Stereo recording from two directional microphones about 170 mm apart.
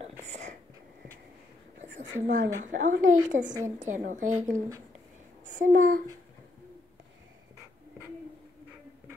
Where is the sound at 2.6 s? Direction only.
45° right (ahead or behind).